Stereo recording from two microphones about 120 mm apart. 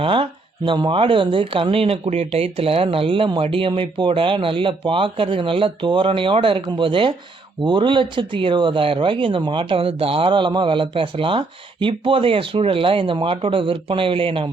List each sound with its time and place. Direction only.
0.0 s speech: 45° right (ahead or behind)